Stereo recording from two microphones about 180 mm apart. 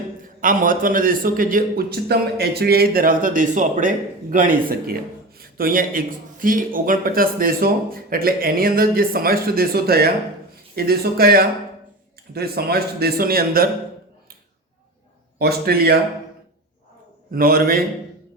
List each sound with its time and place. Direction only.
0.4 s a man's voice: 50° right (ahead or behind)
15.4 s a man's voice: 60° right (ahead or behind)
17.3 s a man's voice: 55° right (ahead or behind)